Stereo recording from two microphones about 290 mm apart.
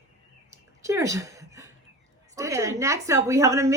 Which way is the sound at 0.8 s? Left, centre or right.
Centre.